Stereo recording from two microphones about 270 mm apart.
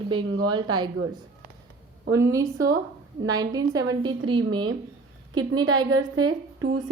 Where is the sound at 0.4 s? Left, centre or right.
Centre.